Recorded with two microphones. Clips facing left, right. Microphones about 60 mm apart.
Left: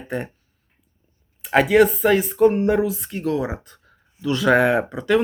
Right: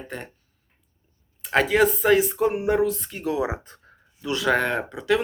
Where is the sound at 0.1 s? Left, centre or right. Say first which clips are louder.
Left 9 dB; centre.